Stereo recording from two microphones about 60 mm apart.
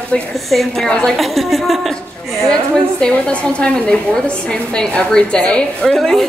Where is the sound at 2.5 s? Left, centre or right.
Centre.